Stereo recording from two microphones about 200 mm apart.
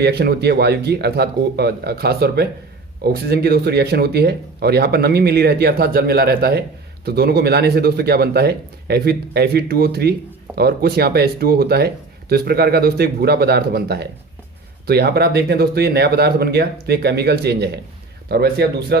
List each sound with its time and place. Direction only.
0.0 s speech: 55° right (ahead or behind)